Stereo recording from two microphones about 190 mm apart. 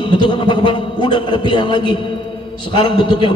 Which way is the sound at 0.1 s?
25° left (ahead or behind).